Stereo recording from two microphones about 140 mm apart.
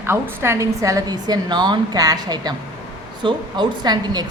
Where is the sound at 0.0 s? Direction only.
20° right (ahead or behind).